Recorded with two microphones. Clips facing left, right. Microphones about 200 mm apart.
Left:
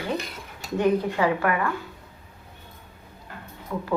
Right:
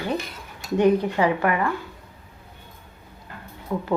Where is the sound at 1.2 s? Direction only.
20° right (ahead or behind).